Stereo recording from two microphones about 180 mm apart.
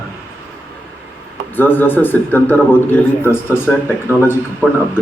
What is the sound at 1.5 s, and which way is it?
A man's voice, 10° left (ahead or behind).